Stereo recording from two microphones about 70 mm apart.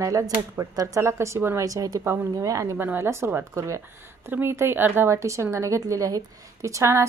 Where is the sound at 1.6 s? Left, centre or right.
Right.